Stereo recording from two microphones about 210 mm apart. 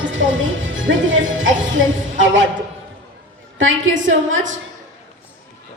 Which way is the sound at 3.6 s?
65° right (ahead or behind).